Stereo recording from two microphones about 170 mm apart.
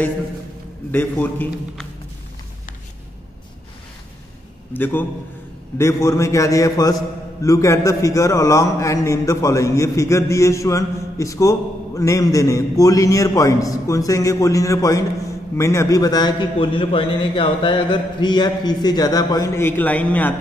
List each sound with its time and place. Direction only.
0.9 s a man's voice: 10° left (ahead or behind)
4.7 s a man's voice: 10° left (ahead or behind)